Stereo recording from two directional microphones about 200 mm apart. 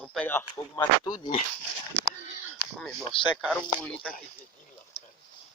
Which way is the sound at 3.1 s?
25° left (ahead or behind).